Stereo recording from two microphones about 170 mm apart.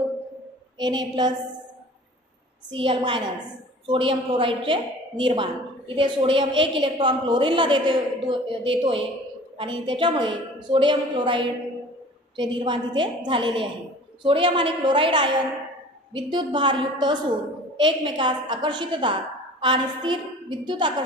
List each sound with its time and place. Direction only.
0.7 s a woman's voice: 25° right (ahead or behind)
2.7 s a woman's voice: 30° right (ahead or behind)